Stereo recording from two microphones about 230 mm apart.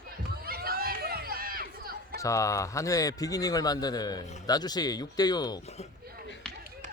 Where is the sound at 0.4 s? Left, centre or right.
Right.